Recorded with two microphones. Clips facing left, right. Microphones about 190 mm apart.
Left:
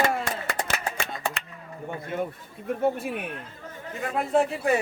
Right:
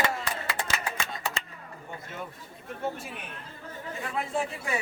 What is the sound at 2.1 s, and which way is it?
Chatter, 55° left (ahead or behind).